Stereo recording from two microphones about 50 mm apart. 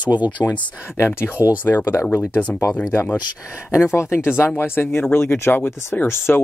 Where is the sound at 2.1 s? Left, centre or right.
Left.